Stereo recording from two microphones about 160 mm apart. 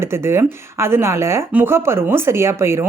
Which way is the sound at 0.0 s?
15° right (ahead or behind).